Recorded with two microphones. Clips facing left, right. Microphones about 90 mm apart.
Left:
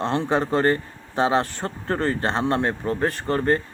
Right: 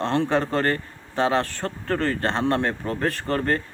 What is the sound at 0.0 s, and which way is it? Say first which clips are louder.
A man's voice: even; 10° left (ahead or behind).